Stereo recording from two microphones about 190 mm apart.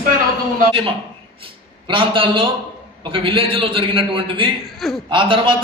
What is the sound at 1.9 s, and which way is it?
A man's voice, 25° right (ahead or behind).